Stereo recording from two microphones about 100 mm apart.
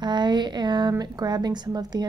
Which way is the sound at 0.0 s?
50° right (ahead or behind).